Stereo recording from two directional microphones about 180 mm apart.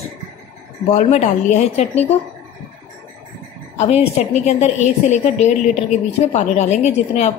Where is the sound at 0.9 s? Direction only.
40° left (ahead or behind).